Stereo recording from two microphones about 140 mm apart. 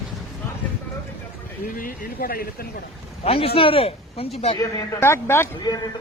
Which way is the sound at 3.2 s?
45° left (ahead or behind).